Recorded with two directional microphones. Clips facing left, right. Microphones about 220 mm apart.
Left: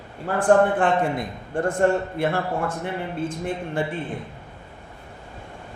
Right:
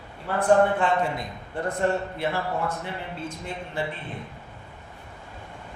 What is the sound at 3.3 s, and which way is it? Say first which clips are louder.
Speech: left 7 dB; 50° left (ahead or behind).